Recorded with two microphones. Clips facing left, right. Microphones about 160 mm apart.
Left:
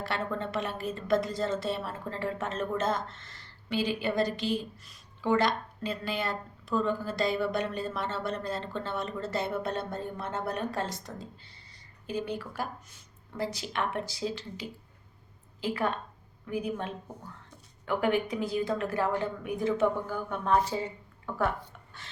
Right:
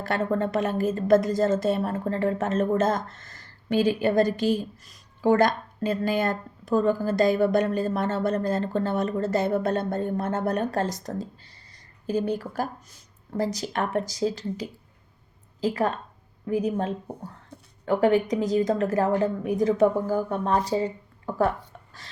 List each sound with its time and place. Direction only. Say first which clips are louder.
0.0 s a woman's voice: right 8 dB; 45° right (ahead or behind)